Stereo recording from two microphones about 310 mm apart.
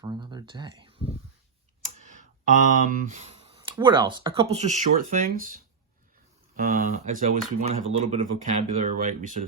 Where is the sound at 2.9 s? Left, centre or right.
Right.